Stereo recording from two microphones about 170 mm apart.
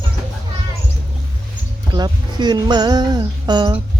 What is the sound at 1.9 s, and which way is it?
Speech, 25° right (ahead or behind).